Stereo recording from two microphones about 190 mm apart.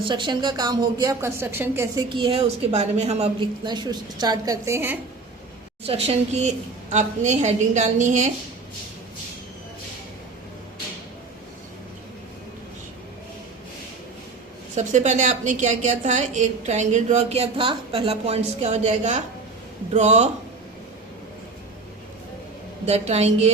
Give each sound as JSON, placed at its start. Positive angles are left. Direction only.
{"t": 0.0, "sound": "speech", "side_deg": -25}
{"t": 2.0, "sound": "a woman's voice", "side_deg": -25}
{"t": 3.6, "sound": "speech", "side_deg": -20}
{"t": 5.8, "sound": "a woman's voice", "side_deg": -30}
{"t": 14.8, "sound": "a woman's voice", "side_deg": -40}
{"t": 22.9, "sound": "a woman's voice", "side_deg": -35}